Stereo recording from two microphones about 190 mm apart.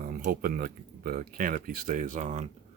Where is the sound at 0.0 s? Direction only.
45° right (ahead or behind).